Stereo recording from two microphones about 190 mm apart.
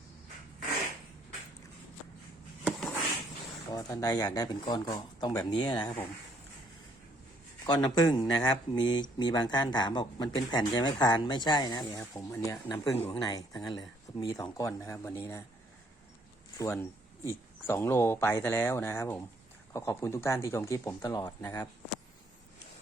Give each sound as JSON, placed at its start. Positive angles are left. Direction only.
{"t": 3.7, "sound": "speech", "side_deg": 20}
{"t": 7.7, "sound": "speech", "side_deg": 20}
{"t": 16.6, "sound": "speech", "side_deg": 10}